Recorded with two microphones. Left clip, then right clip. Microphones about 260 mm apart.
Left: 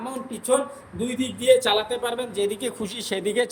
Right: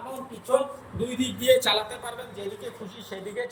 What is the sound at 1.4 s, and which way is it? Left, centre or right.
Speech, left.